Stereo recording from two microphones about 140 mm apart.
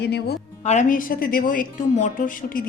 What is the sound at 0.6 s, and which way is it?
A woman's voice, 55° left (ahead or behind).